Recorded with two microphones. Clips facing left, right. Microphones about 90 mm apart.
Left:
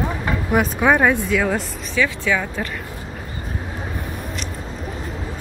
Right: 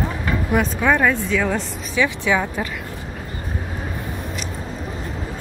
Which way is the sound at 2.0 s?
20° right (ahead or behind).